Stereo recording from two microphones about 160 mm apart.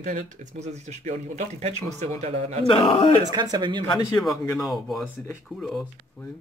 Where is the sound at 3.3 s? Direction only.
25° right (ahead or behind).